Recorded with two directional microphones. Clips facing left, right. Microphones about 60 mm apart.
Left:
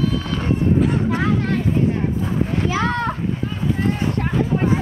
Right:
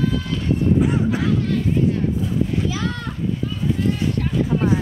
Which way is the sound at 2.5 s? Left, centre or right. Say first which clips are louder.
Left 4 dB; left.